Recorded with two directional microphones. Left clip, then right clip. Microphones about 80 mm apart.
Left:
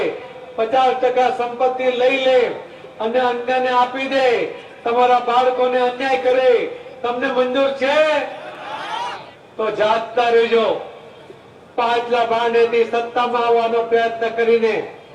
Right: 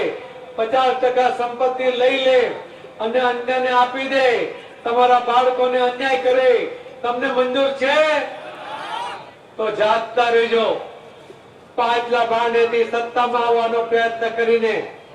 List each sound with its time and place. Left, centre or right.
0.0 s a man's voice: centre